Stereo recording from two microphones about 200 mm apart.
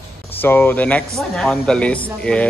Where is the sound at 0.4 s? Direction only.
10° left (ahead or behind).